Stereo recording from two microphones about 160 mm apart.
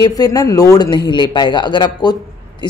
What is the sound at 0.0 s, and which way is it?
A woman's voice, 25° left (ahead or behind).